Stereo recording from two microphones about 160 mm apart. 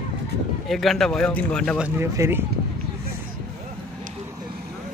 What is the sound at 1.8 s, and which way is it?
Speech, 15° right (ahead or behind).